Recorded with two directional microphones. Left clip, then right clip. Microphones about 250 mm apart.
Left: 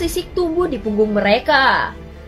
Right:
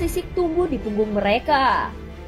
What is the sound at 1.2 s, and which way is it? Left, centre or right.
Speech, right.